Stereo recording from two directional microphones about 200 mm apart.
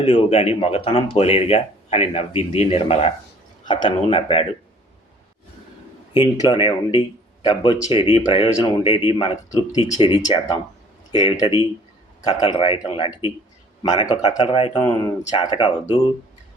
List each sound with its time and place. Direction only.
0.0 s speech: 30° left (ahead or behind)
6.1 s speech: 25° left (ahead or behind)
14.8 s speech: 15° left (ahead or behind)
15.4 s speech: 25° left (ahead or behind)